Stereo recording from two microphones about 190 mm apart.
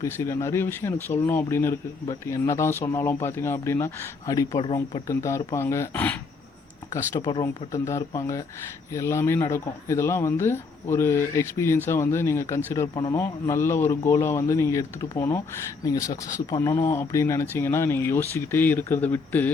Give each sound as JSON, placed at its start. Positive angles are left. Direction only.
{"t": 0.0, "sound": "speech", "side_deg": 15}